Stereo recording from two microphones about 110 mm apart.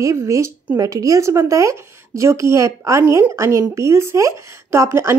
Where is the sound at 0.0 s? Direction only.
30° right (ahead or behind).